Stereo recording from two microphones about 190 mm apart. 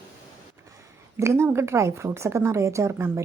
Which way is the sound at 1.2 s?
15° right (ahead or behind).